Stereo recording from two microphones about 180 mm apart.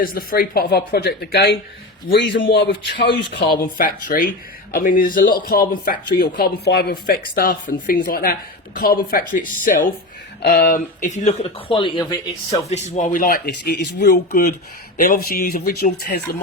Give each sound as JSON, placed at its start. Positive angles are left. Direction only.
{"t": 0.0, "sound": "speech", "side_deg": 55}
{"t": 2.5, "sound": "a man's voice", "side_deg": 75}
{"t": 3.8, "sound": "speech", "side_deg": 50}
{"t": 11.7, "sound": "speech", "side_deg": 25}
{"t": 12.6, "sound": "speech", "side_deg": 40}